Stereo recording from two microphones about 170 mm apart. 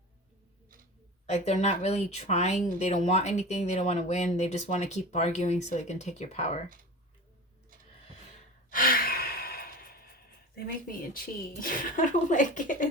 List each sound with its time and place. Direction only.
1.3 s speech: 40° left (ahead or behind)
8.7 s sigh: 55° left (ahead or behind)
10.5 s speech: 55° left (ahead or behind)